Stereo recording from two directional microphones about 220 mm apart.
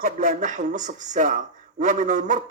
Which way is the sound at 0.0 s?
35° right (ahead or behind).